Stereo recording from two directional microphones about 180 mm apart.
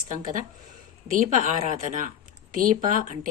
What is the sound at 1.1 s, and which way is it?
A woman's voice, 45° right (ahead or behind).